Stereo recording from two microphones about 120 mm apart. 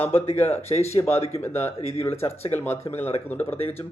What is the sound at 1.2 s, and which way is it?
Speech, 60° left (ahead or behind).